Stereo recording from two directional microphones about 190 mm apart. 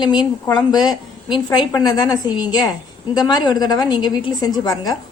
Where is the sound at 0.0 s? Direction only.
20° left (ahead or behind).